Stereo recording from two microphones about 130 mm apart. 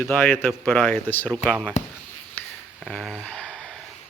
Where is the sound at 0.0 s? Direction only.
15° left (ahead or behind).